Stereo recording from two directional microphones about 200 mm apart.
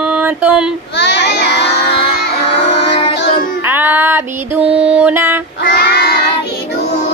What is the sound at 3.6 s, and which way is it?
Music, 10° right (ahead or behind).